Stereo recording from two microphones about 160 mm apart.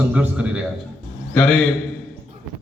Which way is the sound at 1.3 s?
5° left (ahead or behind).